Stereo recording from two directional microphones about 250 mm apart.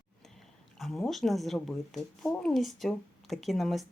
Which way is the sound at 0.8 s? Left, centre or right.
Centre.